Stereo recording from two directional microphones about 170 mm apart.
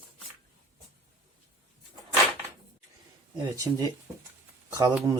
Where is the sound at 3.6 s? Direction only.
20° right (ahead or behind).